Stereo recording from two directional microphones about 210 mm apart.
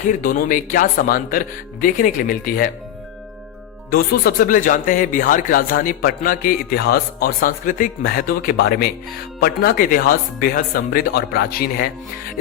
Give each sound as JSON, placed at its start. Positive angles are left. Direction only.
{"t": 0.1, "sound": "speech", "side_deg": 40}
{"t": 3.9, "sound": "speech", "side_deg": 45}